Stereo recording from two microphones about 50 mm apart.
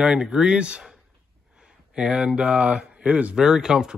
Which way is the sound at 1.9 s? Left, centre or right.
Centre.